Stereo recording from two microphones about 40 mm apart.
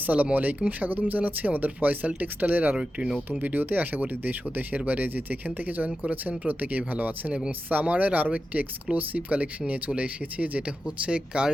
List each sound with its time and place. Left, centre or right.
0.0 s speech: right
10.8 s speech: right